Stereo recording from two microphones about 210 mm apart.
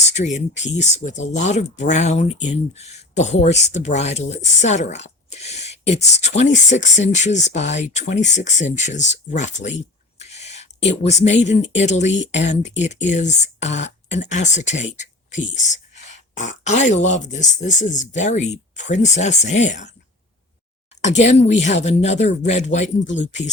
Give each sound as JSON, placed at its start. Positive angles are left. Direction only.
{"t": 0.1, "sound": "speech", "side_deg": 35}
{"t": 10.2, "sound": "a sound", "side_deg": 30}
{"t": 11.8, "sound": "speech", "side_deg": 35}
{"t": 21.0, "sound": "speech", "side_deg": 35}